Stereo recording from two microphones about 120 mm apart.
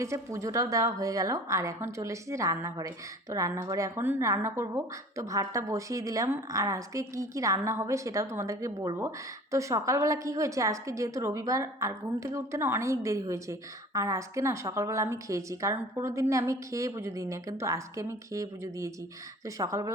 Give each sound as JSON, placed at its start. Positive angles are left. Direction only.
{"t": 0.0, "sound": "a woman's voice", "side_deg": -25}